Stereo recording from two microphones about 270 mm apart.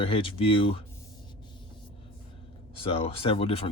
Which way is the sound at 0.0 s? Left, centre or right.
Centre.